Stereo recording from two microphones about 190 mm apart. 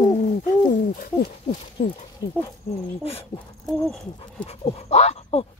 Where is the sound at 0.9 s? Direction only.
45° left (ahead or behind).